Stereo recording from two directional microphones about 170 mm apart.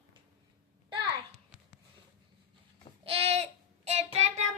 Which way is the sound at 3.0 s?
35° right (ahead or behind).